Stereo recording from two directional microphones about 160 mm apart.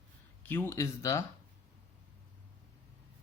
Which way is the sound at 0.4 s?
10° left (ahead or behind).